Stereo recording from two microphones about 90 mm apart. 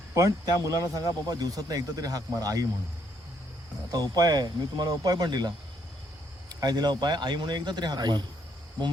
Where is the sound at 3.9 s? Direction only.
45° right (ahead or behind).